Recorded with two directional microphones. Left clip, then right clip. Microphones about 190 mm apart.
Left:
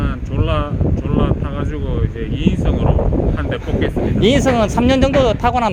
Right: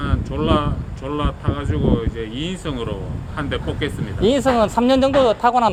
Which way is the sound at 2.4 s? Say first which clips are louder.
Left 9 dB; centre (ahead or behind).